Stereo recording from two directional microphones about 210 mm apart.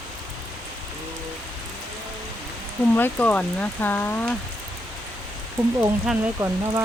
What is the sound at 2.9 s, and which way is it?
Speech, 10° left (ahead or behind).